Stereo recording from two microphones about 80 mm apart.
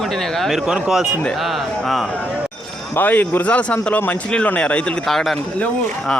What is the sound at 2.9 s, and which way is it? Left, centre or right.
Speech, left.